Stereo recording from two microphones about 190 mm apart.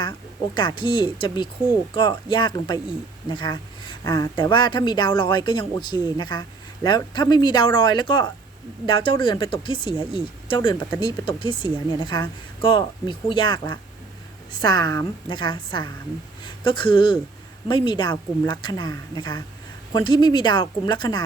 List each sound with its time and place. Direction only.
0.5 s speech: 25° left (ahead or behind)